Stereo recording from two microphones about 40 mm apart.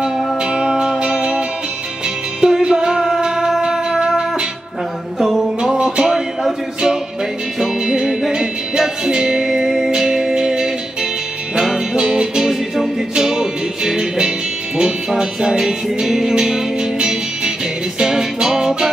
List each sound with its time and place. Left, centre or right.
0.0 s music: right
2.4 s music: centre
5.2 s music: centre